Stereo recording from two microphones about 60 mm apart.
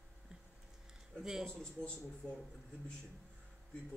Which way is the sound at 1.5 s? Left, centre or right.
Centre.